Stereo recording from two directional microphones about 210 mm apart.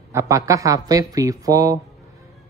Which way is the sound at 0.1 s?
15° right (ahead or behind).